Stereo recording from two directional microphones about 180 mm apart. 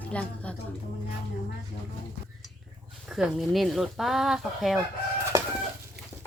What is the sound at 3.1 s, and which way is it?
Speech, centre (ahead or behind).